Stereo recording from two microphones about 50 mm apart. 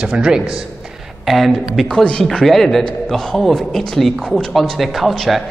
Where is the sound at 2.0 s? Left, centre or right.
Centre.